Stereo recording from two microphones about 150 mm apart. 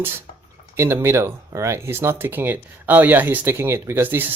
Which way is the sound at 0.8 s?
15° right (ahead or behind).